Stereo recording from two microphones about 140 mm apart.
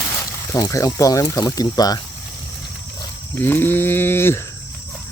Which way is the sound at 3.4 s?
15° left (ahead or behind).